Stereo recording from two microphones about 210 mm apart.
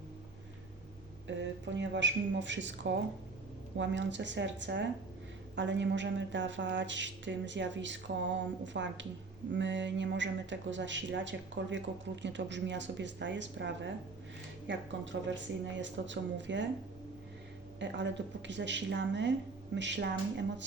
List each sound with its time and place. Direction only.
1.4 s speech: 60° right (ahead or behind)
17.7 s speech: 55° right (ahead or behind)